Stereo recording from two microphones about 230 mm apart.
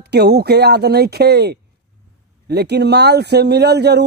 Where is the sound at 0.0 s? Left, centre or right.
Right.